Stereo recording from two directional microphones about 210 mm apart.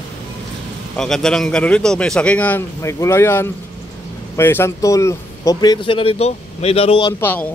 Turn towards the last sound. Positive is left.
turn(degrees=25)  # may be behind; listen again after turning